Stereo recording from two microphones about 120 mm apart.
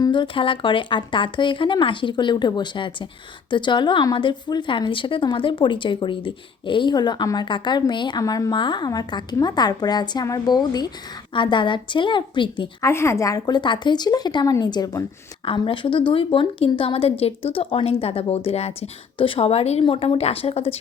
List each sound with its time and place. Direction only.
0.0 s a woman's voice: 40° left (ahead or behind)
12.8 s a woman's voice: 25° left (ahead or behind); by 20.7 s 55° left (ahead or behind)